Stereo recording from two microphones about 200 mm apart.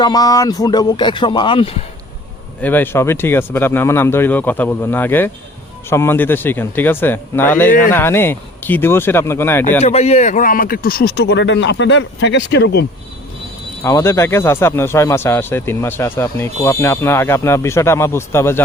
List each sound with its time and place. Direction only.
0.0 s speech: 20° left (ahead or behind)
2.6 s speech: 10° left (ahead or behind)
7.7 s speech: 40° left (ahead or behind)
7.9 s speech: 10° left (ahead or behind)
9.8 s speech: 30° left (ahead or behind); by 12.8 s 60° left (ahead or behind)
13.8 s speech: 15° left (ahead or behind)